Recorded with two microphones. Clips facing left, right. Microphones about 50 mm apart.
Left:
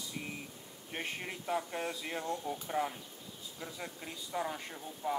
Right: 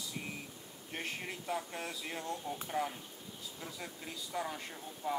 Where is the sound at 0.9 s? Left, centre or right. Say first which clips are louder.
Left 1 dB; centre.